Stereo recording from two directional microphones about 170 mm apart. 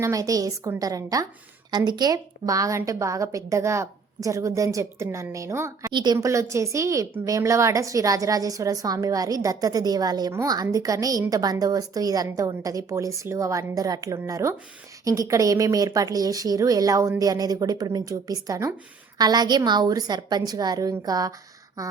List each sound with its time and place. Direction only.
0.0 s a woman's voice: 20° right (ahead or behind)